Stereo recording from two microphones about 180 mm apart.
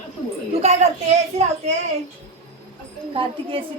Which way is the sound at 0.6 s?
40° right (ahead or behind).